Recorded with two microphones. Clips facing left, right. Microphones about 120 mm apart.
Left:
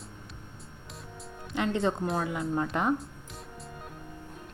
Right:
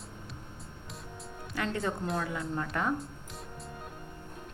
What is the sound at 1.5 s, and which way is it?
Speech, 20° left (ahead or behind).